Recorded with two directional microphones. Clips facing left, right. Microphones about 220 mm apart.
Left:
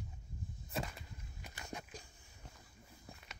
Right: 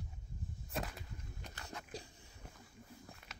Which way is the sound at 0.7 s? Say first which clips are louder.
Even; centre (ahead or behind).